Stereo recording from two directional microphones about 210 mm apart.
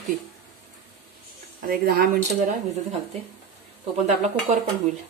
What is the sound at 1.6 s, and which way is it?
Speech, 45° right (ahead or behind).